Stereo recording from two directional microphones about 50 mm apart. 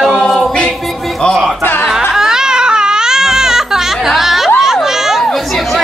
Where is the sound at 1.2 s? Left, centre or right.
Centre.